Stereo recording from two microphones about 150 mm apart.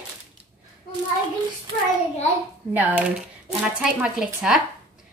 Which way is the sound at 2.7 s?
10° right (ahead or behind).